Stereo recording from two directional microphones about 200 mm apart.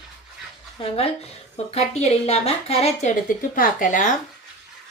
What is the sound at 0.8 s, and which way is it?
A woman's voice, 30° left (ahead or behind).